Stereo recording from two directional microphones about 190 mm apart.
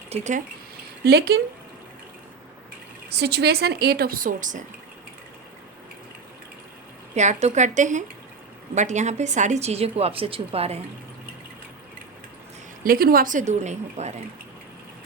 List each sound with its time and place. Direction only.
0.1 s a woman's voice: 40° right (ahead or behind)
1.0 s speech: 60° right (ahead or behind)
3.1 s speech: 60° right (ahead or behind); by 4.6 s 40° right (ahead or behind)
7.1 s a woman's voice: 35° right (ahead or behind)
12.8 s speech: 50° right (ahead or behind)